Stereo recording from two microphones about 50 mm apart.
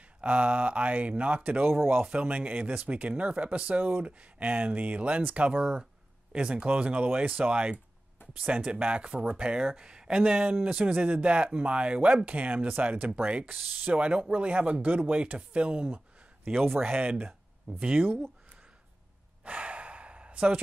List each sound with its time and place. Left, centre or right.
0.0 s speech: right
1.7 s speech: right
2.0 s speech: right
16.6 s speech: right
19.4 s sigh: right